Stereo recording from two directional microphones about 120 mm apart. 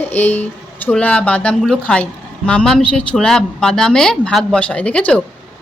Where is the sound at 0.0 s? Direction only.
15° left (ahead or behind).